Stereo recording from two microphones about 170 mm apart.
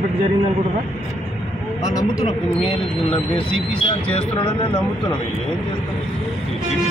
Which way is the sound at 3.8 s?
30° left (ahead or behind).